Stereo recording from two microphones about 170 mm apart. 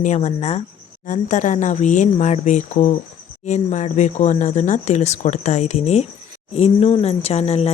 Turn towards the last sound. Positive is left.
turn(degrees=35)  # may be behind; listen again after turning